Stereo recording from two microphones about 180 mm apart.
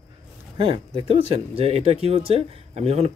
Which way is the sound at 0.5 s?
30° right (ahead or behind).